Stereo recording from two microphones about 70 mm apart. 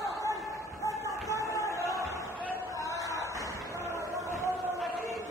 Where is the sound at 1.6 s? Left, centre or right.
Right.